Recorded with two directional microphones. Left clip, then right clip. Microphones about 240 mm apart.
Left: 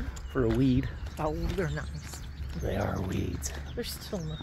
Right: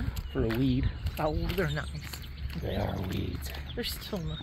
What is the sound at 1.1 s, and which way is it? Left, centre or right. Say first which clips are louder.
Speech: right 1 dB; right.